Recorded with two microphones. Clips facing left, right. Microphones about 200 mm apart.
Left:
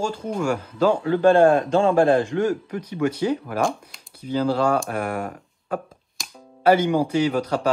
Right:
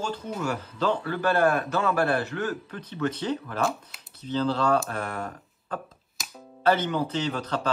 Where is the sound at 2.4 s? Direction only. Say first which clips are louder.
Left 8 dB; 15° left (ahead or behind).